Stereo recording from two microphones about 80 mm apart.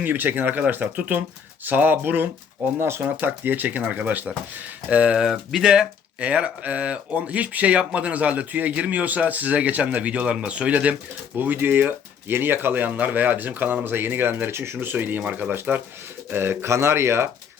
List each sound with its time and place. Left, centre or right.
0.0 s speech: right
5.2 s speech: centre; by 17.2 s right